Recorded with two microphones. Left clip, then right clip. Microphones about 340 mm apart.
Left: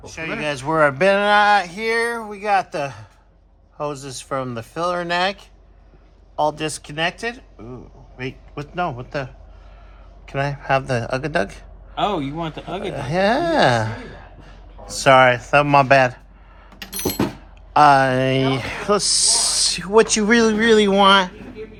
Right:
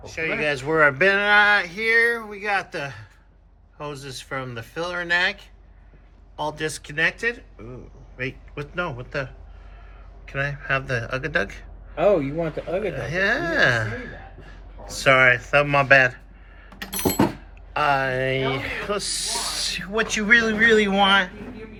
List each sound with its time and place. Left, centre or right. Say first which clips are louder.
0.0 s speech: right 1 dB; centre
12.8 s speech: left 6 dB; centre
17.7 s speech: left 8 dB; centre